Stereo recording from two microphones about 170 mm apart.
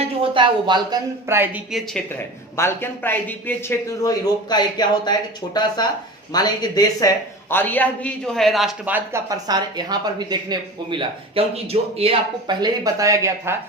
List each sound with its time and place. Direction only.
0.2 s speech: 30° right (ahead or behind)
1.3 s speech: 10° right (ahead or behind)
2.1 s speech: 15° left (ahead or behind)
7.5 s speech: 10° left (ahead or behind); by 9.2 s 10° right (ahead or behind)
9.3 s speech: 25° right (ahead or behind)